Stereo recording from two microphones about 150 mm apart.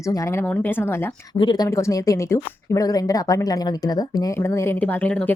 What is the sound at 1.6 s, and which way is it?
Speech, 20° left (ahead or behind).